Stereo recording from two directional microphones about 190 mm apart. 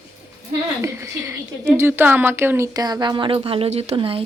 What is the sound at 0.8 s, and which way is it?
A woman's voice, 15° right (ahead or behind).